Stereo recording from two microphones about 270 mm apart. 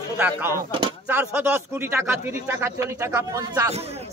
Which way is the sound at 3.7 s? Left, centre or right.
Right.